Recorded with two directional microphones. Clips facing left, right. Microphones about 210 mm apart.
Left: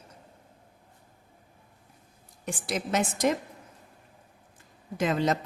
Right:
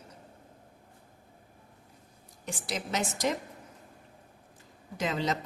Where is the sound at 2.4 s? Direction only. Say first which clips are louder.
Left 4 dB; 50° left (ahead or behind).